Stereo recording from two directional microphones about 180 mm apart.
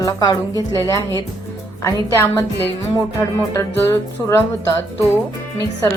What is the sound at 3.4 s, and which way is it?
Speech, 15° left (ahead or behind).